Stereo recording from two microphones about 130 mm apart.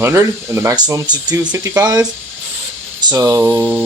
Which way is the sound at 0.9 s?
35° right (ahead or behind).